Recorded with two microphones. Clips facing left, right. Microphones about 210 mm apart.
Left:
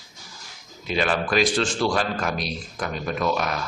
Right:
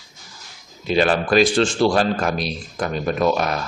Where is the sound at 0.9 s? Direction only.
35° right (ahead or behind).